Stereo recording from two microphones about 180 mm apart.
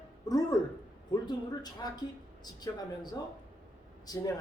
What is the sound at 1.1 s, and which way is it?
A man's voice, 20° left (ahead or behind).